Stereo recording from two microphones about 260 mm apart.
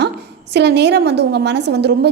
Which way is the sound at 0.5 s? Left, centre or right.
Right.